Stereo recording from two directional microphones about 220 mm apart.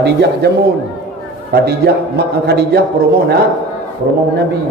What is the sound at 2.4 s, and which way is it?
Speech, 50° right (ahead or behind).